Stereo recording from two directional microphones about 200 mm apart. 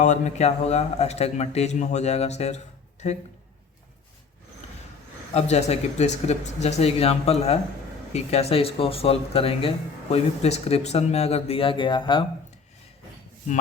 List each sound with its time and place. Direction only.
0.0 s speech: 35° left (ahead or behind)
5.3 s speech: 35° left (ahead or behind)